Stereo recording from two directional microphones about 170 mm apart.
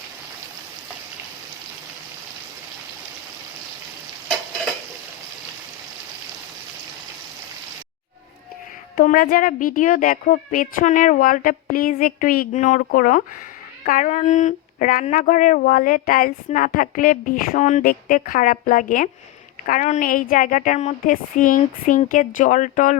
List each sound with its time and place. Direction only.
9.0 s a woman's voice: 55° left (ahead or behind)